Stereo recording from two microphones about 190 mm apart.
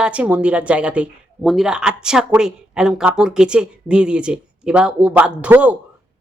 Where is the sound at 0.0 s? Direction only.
5° right (ahead or behind).